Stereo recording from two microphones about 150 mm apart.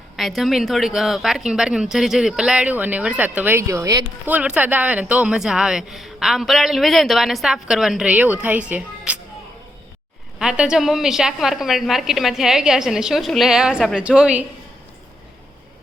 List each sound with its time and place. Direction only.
0.2 s a woman's voice: centre (ahead or behind); by 4.0 s 20° right (ahead or behind)
4.3 s a woman's voice: 10° right (ahead or behind)
10.3 s a woman's voice: 5° right (ahead or behind)